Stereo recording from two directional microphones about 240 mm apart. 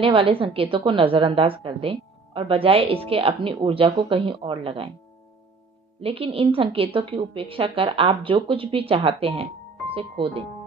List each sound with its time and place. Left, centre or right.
0.0 s a woman's voice: right
5.9 s a woman's voice: right